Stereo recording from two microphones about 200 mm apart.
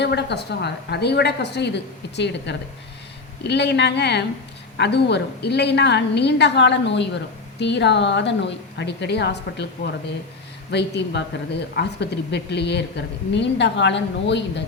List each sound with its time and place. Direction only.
0.0 s a woman's voice: 55° left (ahead or behind)